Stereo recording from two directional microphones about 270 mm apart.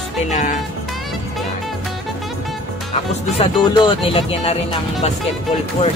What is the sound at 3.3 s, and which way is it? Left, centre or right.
Speech, centre.